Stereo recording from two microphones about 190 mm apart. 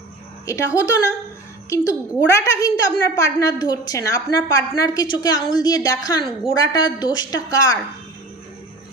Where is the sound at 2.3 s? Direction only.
15° left (ahead or behind).